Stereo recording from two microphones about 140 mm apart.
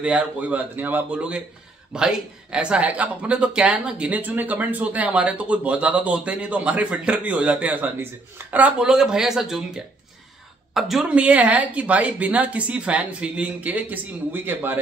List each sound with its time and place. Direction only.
0.0 s speech: 5° right (ahead or behind)